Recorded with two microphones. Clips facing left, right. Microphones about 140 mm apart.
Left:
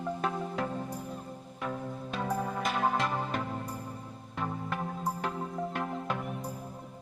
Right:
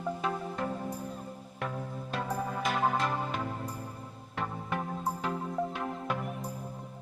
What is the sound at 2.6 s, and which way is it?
Music, centre (ahead or behind).